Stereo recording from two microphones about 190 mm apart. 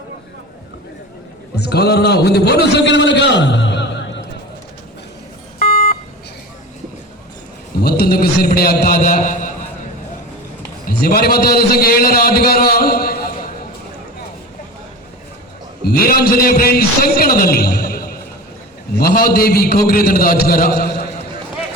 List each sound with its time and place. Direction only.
1.5 s a man's voice: 60° left (ahead or behind)
2.8 s a man's voice: 70° left (ahead or behind)
5.6 s a sound: 45° left (ahead or behind)
7.8 s a man's voice: 55° left (ahead or behind)
10.8 s a man's voice: 50° left (ahead or behind)
15.8 s a man's voice: 50° left (ahead or behind)